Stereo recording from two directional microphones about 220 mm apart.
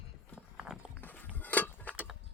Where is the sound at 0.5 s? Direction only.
5° right (ahead or behind).